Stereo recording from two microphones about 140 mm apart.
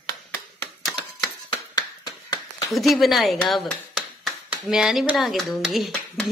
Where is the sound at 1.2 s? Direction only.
30° left (ahead or behind).